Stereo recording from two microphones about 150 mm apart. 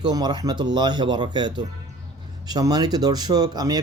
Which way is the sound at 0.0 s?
25° right (ahead or behind).